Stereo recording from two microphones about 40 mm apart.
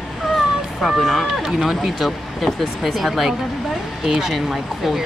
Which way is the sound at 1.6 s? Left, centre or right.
Centre.